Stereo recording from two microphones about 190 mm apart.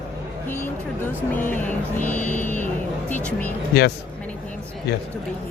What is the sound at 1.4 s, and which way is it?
Music, 10° left (ahead or behind).